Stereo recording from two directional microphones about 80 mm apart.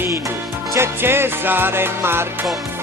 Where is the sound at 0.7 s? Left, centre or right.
Right.